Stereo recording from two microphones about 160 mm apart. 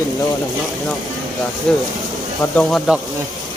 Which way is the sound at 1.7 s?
5° left (ahead or behind).